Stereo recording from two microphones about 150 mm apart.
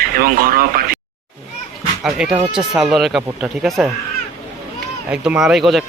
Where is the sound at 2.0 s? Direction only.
5° right (ahead or behind).